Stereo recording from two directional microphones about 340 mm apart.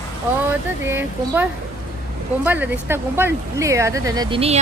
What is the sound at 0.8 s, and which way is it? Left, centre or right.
Speech, centre.